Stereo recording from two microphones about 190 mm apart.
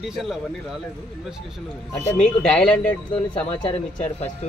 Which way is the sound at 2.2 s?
5° left (ahead or behind).